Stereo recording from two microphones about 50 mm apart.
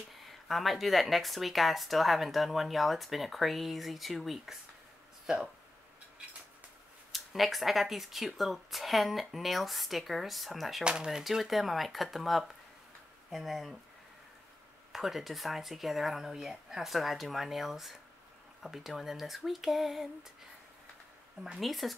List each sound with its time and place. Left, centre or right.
0.2 s speech: centre
7.1 s speech: centre
10.8 s speech: centre
11.2 s speech: centre
14.9 s speech: centre
21.5 s speech: centre